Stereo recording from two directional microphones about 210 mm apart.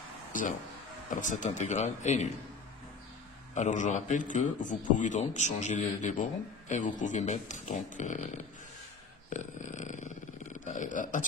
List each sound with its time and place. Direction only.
0.3 s a man's voice: 40° left (ahead or behind)
3.5 s a man's voice: 35° left (ahead or behind)